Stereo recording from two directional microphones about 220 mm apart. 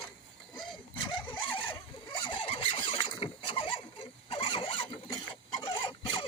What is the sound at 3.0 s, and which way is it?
Vehicle, 25° left (ahead or behind).